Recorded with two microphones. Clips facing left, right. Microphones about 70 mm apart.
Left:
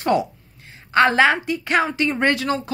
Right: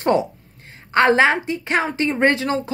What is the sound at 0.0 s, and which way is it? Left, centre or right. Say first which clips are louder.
A woman's voice: right 1 dB; right.